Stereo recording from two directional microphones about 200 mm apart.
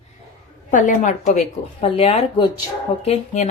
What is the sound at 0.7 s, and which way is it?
A woman's voice, 40° left (ahead or behind).